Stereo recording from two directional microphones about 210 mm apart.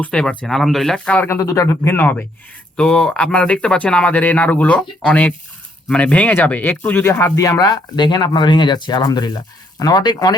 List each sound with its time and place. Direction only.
0.0 s speech: 5° left (ahead or behind)